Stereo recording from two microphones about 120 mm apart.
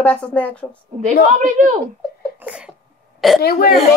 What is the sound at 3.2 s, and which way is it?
Speech, centre (ahead or behind).